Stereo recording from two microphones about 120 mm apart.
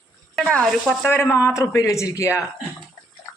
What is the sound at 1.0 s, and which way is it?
Speech, 20° left (ahead or behind).